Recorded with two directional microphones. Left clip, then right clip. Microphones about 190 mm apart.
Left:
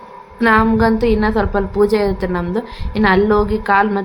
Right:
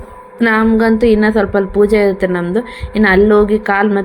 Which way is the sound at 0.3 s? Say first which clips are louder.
Right 1 dB; 10° right (ahead or behind).